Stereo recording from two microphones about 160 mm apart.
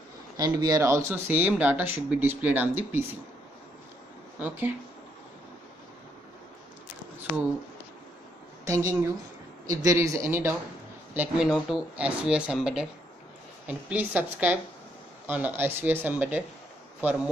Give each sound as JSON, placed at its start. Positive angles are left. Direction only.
{"t": 0.4, "sound": "speech", "side_deg": -25}
{"t": 4.4, "sound": "speech", "side_deg": -10}
{"t": 8.6, "sound": "speech", "side_deg": -20}
{"t": 11.1, "sound": "speech", "side_deg": -5}